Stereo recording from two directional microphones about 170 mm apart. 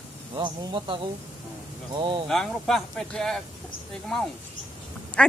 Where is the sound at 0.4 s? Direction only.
30° right (ahead or behind).